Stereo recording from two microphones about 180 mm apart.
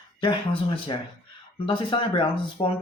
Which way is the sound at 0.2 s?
25° left (ahead or behind).